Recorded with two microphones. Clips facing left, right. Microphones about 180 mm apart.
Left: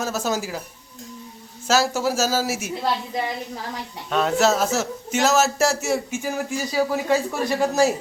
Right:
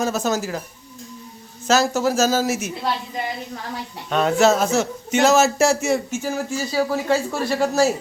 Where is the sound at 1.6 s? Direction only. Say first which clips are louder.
Right 2 dB; 10° left (ahead or behind).